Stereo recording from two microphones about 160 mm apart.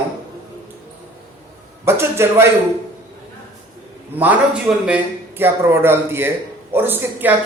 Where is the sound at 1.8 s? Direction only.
15° right (ahead or behind).